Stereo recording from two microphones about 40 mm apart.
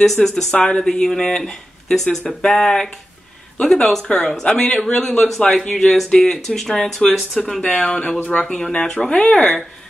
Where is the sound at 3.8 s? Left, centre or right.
Centre.